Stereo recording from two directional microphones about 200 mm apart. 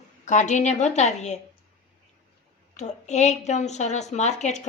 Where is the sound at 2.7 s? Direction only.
35° left (ahead or behind).